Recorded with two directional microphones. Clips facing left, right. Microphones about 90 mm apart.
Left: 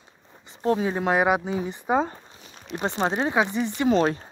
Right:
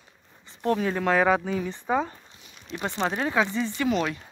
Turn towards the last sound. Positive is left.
turn(degrees=35)  # may be behind; listen again after turning